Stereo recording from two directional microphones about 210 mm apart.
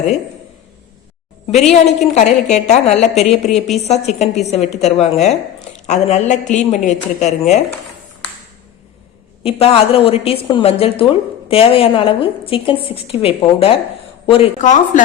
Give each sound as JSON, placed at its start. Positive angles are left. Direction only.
{"t": 1.7, "sound": "a woman's voice", "side_deg": 30}
{"t": 9.4, "sound": "a woman's voice", "side_deg": 30}